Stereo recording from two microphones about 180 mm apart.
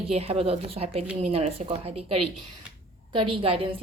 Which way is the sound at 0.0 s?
35° right (ahead or behind).